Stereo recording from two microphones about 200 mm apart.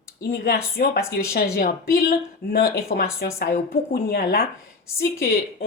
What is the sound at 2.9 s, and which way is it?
Speech, 40° left (ahead or behind).